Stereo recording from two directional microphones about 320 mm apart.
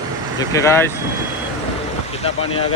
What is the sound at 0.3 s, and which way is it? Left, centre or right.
Speech, centre.